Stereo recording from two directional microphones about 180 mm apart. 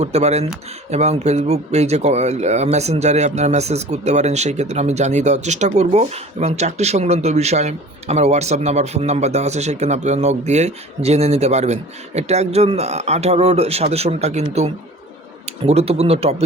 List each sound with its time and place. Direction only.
0.0 s speech: 40° right (ahead or behind)